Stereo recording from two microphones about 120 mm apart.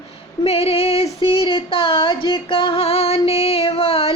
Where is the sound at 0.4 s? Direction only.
55° left (ahead or behind).